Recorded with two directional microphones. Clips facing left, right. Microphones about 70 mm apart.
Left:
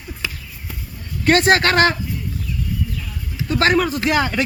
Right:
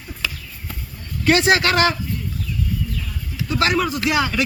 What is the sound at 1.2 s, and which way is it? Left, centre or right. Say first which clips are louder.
Speech: left 2 dB; left.